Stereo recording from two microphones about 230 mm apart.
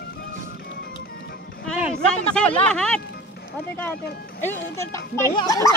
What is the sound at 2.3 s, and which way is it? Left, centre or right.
Speech, centre.